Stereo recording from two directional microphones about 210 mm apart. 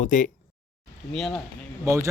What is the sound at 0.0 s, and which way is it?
Speech, 40° left (ahead or behind).